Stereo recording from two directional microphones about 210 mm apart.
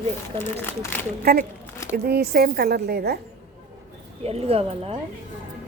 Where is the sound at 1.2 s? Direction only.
45° right (ahead or behind).